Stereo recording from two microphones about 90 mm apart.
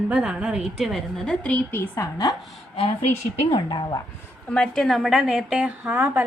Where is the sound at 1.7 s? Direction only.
35° left (ahead or behind).